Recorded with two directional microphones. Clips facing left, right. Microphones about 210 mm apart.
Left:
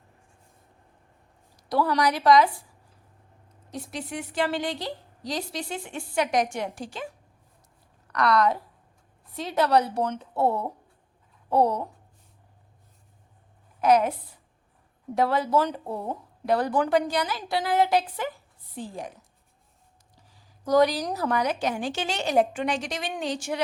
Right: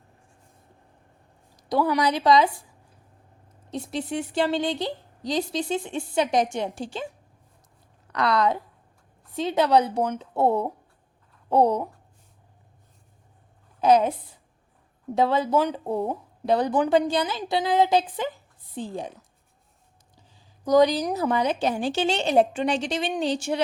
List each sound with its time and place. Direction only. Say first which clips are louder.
1.5 s a woman's voice: right 2 dB; 20° right (ahead or behind)
3.7 s a woman's voice: right 5 dB; 25° right (ahead or behind)
8.1 s a woman's voice: even; 25° right (ahead or behind)
13.8 s a woman's voice: right 2 dB; 25° right (ahead or behind)
15.1 s a woman's voice: right 2 dB; 20° right (ahead or behind)
20.3 s a sound: right 2 dB; 20° right (ahead or behind)
21.1 s a woman's voice: right 2 dB; 20° right (ahead or behind)